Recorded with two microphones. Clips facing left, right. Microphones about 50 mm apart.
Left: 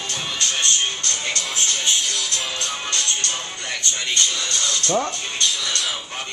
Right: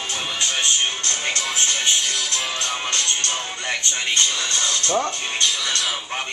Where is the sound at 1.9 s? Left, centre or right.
Centre.